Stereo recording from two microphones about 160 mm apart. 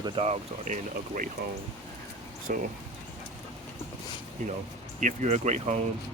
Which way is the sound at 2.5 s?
60° right (ahead or behind).